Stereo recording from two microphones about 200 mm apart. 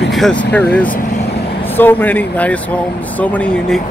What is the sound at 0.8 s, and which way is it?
Speech, 40° left (ahead or behind).